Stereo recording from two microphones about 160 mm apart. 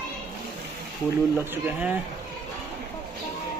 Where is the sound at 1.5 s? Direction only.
10° right (ahead or behind).